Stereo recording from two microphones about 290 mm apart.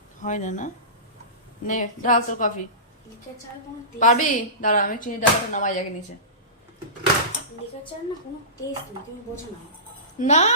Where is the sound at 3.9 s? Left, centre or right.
Left.